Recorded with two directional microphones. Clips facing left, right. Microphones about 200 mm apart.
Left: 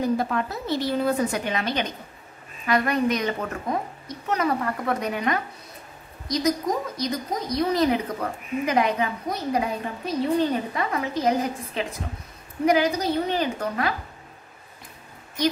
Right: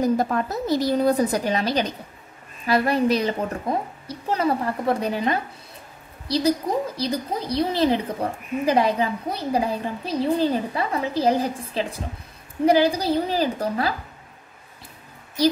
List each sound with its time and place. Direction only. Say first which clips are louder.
0.0 s a woman's voice: right 3 dB; 40° right (ahead or behind)